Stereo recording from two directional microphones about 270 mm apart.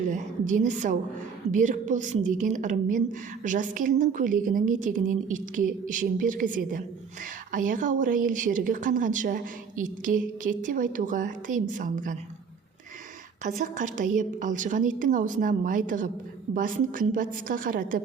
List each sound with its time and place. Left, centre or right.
0.1 s a woman's voice: right
13.4 s a woman's voice: right